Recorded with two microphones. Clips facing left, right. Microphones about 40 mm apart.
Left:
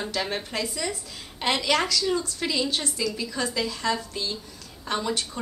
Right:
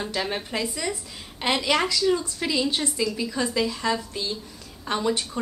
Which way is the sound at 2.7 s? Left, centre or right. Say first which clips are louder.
Right 2 dB; centre.